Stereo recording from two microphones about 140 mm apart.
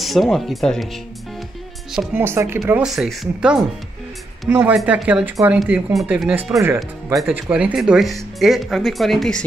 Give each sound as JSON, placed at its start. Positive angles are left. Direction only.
{"t": 0.0, "sound": "speech", "side_deg": 0}
{"t": 2.1, "sound": "speech", "side_deg": -15}
{"t": 2.7, "sound": "speech", "side_deg": -5}
{"t": 4.5, "sound": "speech", "side_deg": -15}